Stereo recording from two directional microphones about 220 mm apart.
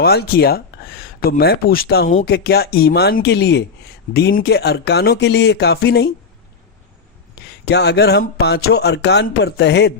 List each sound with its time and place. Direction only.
0.0 s speech: 45° left (ahead or behind)
7.6 s speech: 50° left (ahead or behind)